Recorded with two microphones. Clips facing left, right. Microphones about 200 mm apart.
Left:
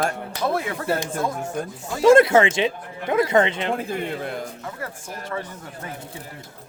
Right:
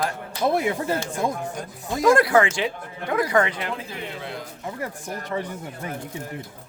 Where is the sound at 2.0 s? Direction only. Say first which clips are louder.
Left 4 dB; 25° left (ahead or behind).